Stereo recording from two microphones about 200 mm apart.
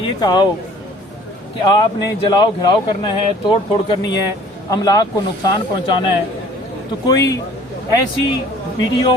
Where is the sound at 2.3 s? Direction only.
20° left (ahead or behind).